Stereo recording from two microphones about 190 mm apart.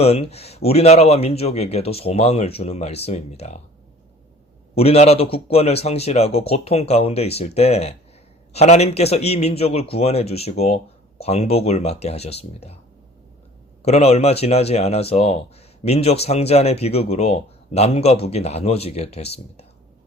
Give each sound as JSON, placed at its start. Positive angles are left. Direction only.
{"t": 0.0, "sound": "speech", "side_deg": 35}
{"t": 4.7, "sound": "speech", "side_deg": 30}
{"t": 13.8, "sound": "speech", "side_deg": 35}